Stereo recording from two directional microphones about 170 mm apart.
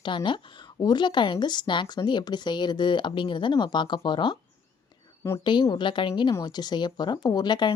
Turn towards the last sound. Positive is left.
turn(degrees=25)  # may be behind; listen again after turning